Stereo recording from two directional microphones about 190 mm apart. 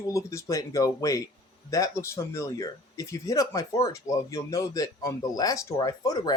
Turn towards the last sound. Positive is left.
turn(degrees=20)  # may be behind; listen again after turning